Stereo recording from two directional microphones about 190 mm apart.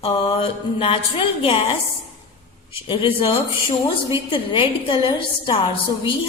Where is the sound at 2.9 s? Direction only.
25° left (ahead or behind).